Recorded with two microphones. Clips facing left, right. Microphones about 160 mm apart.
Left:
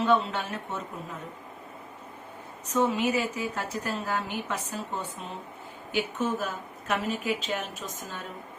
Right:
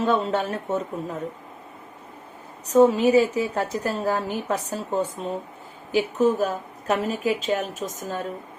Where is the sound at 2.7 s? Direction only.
40° right (ahead or behind).